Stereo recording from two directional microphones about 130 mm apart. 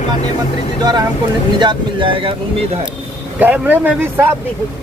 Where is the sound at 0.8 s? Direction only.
30° right (ahead or behind).